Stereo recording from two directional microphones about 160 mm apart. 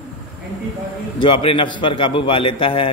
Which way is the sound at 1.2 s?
35° left (ahead or behind).